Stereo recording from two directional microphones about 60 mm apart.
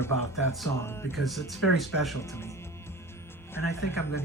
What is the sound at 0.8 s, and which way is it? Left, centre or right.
Speech, left.